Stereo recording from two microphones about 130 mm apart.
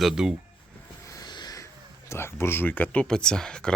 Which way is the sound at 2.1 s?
20° left (ahead or behind).